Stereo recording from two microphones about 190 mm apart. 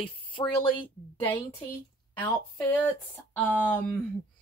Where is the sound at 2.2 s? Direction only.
10° left (ahead or behind).